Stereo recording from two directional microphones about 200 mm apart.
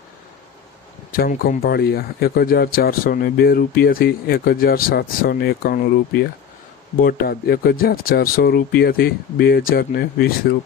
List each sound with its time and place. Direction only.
1.1 s speech: 45° left (ahead or behind)